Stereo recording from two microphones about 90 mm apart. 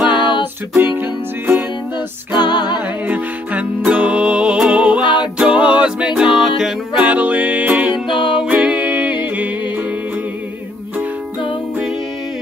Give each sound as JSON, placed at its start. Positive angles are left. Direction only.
{"t": 0.0, "sound": "music", "side_deg": 60}
{"t": 0.7, "sound": "music", "side_deg": -20}
{"t": 2.4, "sound": "music", "side_deg": 55}
{"t": 3.9, "sound": "music", "side_deg": -15}
{"t": 7.1, "sound": "music", "side_deg": -15}
{"t": 8.2, "sound": "music", "side_deg": 65}
{"t": 8.5, "sound": "music", "side_deg": -15}